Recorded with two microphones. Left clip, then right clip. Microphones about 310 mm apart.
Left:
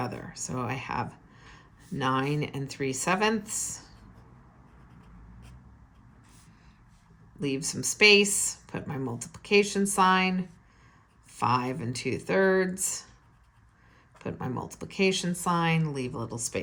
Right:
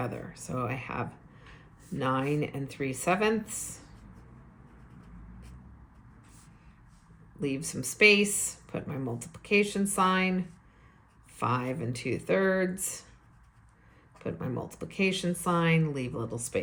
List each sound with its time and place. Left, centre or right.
0.0 s speech: centre
7.3 s speech: centre
14.2 s speech: centre